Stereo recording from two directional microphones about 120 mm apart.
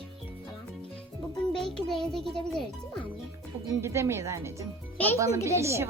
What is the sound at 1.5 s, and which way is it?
A child's voice, 5° left (ahead or behind).